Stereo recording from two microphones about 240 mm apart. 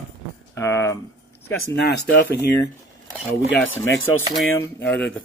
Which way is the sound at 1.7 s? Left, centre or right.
Left.